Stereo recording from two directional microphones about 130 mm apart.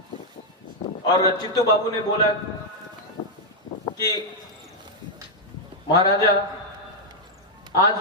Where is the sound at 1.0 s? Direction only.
30° left (ahead or behind).